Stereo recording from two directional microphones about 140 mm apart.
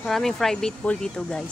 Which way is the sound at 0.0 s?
Centre (ahead or behind).